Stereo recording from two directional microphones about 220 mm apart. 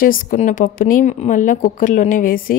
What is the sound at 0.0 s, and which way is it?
Speech, 40° left (ahead or behind).